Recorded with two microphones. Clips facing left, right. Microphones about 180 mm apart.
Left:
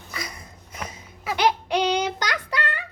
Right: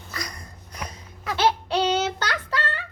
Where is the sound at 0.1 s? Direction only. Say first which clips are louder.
Even; 5° left (ahead or behind).